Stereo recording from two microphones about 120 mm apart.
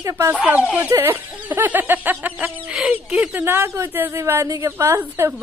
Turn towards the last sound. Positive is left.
turn(degrees=-20)  # may be behind; listen again after turning